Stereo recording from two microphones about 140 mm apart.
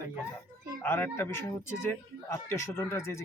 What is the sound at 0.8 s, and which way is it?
Speech, 15° left (ahead or behind).